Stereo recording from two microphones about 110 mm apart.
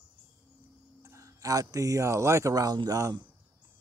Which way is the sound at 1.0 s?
30° right (ahead or behind).